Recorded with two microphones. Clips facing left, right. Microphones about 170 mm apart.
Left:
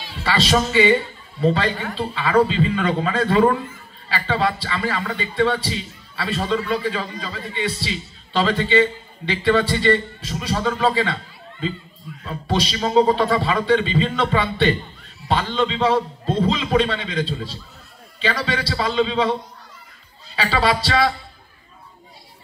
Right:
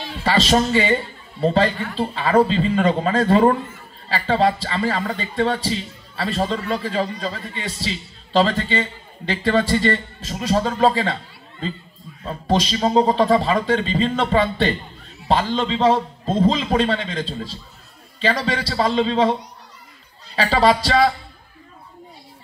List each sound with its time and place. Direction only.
0.2 s a man's voice: 45° right (ahead or behind)
12.3 s a man's voice: 45° right (ahead or behind)
20.3 s a man's voice: 40° right (ahead or behind)